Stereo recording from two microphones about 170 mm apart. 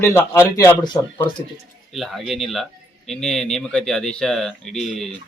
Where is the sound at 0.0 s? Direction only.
15° left (ahead or behind).